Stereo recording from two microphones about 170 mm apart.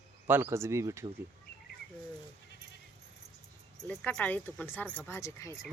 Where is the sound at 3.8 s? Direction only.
5° left (ahead or behind).